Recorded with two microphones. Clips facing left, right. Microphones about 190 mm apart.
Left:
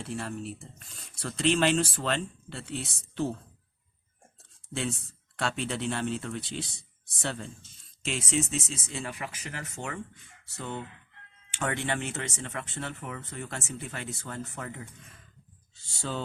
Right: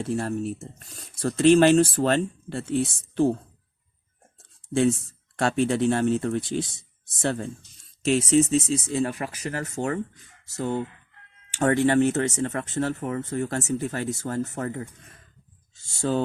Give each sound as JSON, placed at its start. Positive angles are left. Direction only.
{"t": 0.0, "sound": "speech", "side_deg": -45}
{"t": 4.4, "sound": "a sound", "side_deg": -45}
{"t": 5.4, "sound": "speech", "side_deg": -45}
{"t": 16.0, "sound": "speech", "side_deg": -45}